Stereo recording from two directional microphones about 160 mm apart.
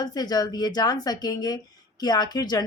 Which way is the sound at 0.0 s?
25° left (ahead or behind).